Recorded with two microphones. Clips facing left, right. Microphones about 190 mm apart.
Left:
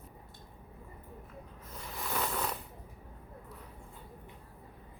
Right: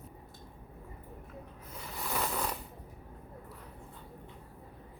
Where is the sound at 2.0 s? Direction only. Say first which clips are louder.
Even; centre (ahead or behind).